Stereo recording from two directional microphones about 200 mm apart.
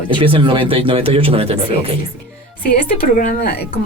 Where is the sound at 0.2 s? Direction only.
25° right (ahead or behind).